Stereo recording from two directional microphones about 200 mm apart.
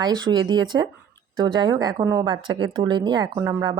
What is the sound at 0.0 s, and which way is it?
A woman's voice, 20° right (ahead or behind).